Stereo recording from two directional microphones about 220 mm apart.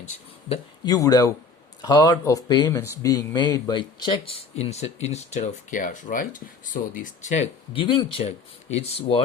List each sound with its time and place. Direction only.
0.4 s speech: 25° left (ahead or behind)
0.9 s speech: 15° left (ahead or behind)